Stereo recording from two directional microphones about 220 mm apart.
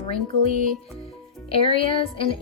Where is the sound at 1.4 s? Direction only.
25° left (ahead or behind).